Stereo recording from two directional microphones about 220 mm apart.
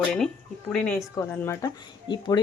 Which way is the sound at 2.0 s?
20° left (ahead or behind).